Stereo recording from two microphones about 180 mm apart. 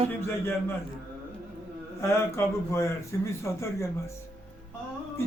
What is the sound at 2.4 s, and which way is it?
Speech, 15° left (ahead or behind).